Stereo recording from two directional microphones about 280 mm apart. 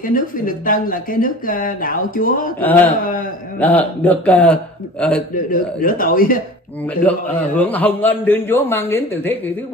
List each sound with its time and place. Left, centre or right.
0.0 s speech: left
2.6 s a man's voice: centre
5.3 s speech: left
7.0 s a man's voice: centre